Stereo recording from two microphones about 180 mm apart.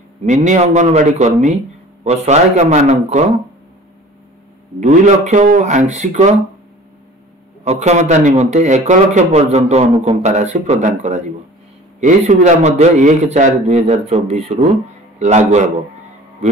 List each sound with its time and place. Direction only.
0.2 s a man's voice: 40° right (ahead or behind)
4.7 s a man's voice: 40° right (ahead or behind)
7.6 s a man's voice: 35° right (ahead or behind)